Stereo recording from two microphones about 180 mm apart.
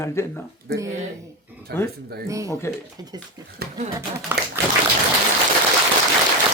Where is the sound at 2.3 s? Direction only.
15° right (ahead or behind).